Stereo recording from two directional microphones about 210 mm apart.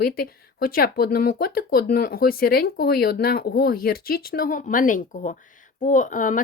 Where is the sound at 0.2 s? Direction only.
45° left (ahead or behind).